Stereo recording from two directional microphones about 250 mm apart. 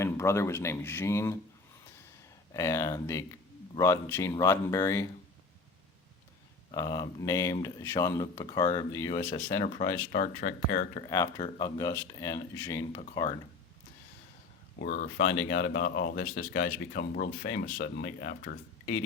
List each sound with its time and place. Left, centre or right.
0.0 s speech: centre
2.5 s speech: centre
6.7 s speech: centre
10.1 s speech: left
10.9 s speech: centre
11.4 s speech: left
11.8 s speech: centre
14.8 s speech: left